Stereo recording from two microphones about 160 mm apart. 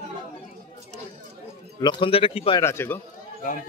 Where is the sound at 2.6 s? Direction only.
15° left (ahead or behind).